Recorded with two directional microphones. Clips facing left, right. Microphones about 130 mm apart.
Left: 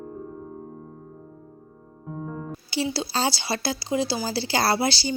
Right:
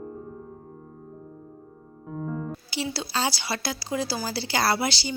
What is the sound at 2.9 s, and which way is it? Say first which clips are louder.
Speech: left 2 dB; 30° left (ahead or behind).